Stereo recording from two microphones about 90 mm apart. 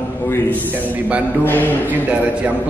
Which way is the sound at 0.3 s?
20° left (ahead or behind).